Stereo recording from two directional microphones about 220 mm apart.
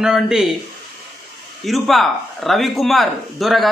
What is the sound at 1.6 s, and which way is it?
Speech, centre (ahead or behind).